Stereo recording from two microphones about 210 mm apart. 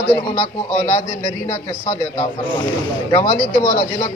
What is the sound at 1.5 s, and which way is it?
Speech, 35° left (ahead or behind).